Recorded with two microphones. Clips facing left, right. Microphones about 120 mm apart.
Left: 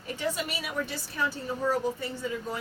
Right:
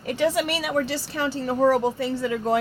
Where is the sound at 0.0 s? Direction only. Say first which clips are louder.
Right 9 dB; 80° right.